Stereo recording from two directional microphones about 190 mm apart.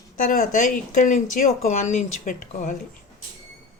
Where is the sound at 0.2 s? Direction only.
40° left (ahead or behind).